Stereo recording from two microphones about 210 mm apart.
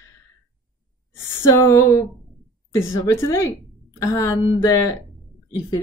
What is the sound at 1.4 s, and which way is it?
Speech, 15° left (ahead or behind).